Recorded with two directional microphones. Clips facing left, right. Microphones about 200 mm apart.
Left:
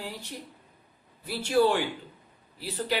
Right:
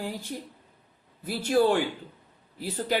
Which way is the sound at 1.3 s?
50° right (ahead or behind).